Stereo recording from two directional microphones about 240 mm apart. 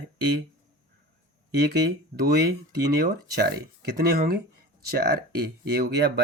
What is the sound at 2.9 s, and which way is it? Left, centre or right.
Speech, right.